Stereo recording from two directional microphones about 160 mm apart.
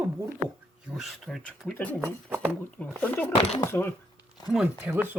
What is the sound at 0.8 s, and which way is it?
Speech, centre (ahead or behind).